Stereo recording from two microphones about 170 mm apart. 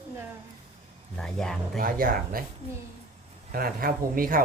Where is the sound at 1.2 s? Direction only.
5° left (ahead or behind).